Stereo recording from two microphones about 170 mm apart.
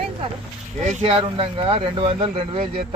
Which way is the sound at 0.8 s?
40° right (ahead or behind).